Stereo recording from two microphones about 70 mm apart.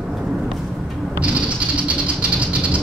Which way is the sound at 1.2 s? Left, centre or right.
Centre.